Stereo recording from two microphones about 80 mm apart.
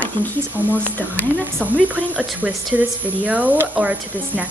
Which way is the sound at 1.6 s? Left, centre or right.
Centre.